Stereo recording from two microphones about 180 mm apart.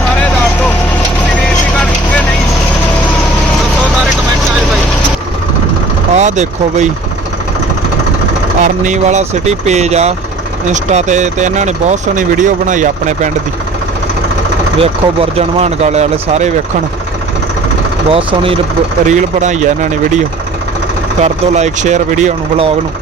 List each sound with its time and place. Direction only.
6.1 s speech: 40° right (ahead or behind)
8.6 s speech: 45° right (ahead or behind)
14.8 s speech: 35° right (ahead or behind)
18.1 s speech: 30° right (ahead or behind)
19.0 s speech: 40° right (ahead or behind)